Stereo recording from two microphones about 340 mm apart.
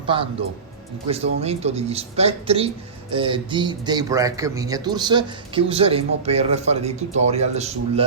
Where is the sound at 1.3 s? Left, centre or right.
Centre.